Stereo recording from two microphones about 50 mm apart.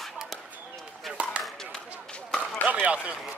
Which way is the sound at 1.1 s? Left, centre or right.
Centre.